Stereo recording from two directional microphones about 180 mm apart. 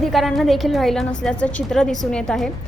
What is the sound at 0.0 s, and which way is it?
A woman's voice, centre (ahead or behind).